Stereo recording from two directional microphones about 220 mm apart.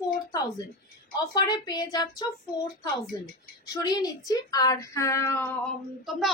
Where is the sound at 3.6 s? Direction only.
15° left (ahead or behind).